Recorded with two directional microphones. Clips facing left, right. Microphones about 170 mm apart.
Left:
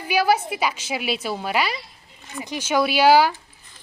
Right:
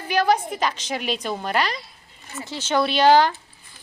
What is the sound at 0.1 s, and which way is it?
A woman's voice, 10° left (ahead or behind).